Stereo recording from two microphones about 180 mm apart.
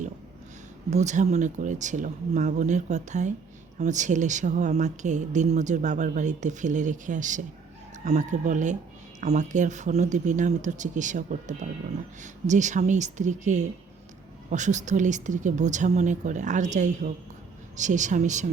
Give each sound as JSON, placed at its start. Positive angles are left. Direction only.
{"t": 0.9, "sound": "speech", "side_deg": -40}